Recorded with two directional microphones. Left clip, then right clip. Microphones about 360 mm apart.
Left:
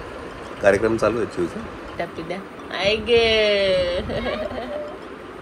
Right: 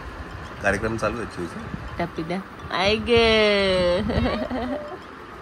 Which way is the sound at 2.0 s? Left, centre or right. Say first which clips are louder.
Right 1 dB; right.